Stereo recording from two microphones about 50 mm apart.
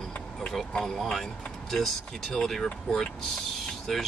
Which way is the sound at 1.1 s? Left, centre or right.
Centre.